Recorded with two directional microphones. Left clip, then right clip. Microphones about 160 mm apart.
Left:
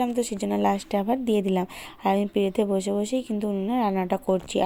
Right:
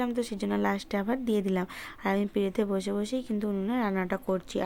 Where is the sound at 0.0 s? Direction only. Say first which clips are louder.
Left 5 dB; 10° left (ahead or behind).